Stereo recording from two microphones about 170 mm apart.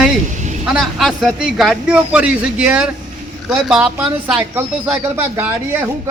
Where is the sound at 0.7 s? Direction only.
Centre (ahead or behind).